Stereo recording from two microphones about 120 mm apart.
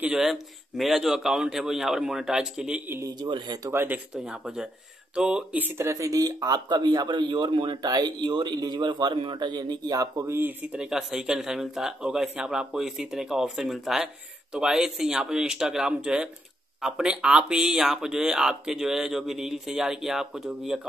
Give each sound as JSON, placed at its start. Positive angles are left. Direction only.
{"t": 0.0, "sound": "speech", "side_deg": -5}
{"t": 2.9, "sound": "a man's voice", "side_deg": -25}
{"t": 3.2, "sound": "speech", "side_deg": -40}
{"t": 3.7, "sound": "speech", "side_deg": -15}
{"t": 4.1, "sound": "speech", "side_deg": -5}